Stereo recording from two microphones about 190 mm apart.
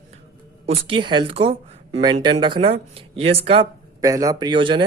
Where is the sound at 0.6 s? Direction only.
25° right (ahead or behind).